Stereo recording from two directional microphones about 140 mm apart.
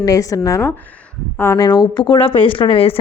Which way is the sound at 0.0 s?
25° left (ahead or behind).